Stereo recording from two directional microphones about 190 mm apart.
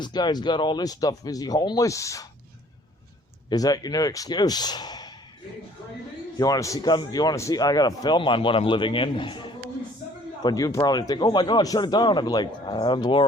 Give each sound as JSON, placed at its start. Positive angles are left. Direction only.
{"t": 0.0, "sound": "a man's voice", "side_deg": 20}
{"t": 3.5, "sound": "a man's voice", "side_deg": 20}
{"t": 6.4, "sound": "a man's voice", "side_deg": 20}